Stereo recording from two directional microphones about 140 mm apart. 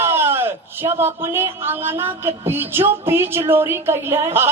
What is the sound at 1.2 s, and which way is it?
A man's voice, 15° right (ahead or behind).